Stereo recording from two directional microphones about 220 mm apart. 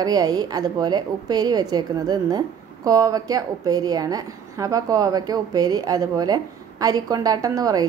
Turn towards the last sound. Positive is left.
turn(degrees=-15)  # may be behind; listen again after turning